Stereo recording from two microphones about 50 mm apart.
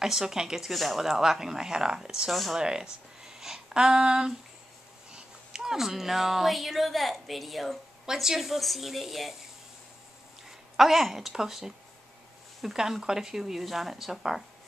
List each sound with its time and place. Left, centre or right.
0.0 s speech: centre
3.3 s a sound: centre
5.1 s speech: centre
10.8 s a woman's voice: centre